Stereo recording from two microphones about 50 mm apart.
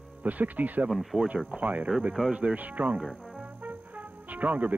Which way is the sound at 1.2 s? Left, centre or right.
Centre.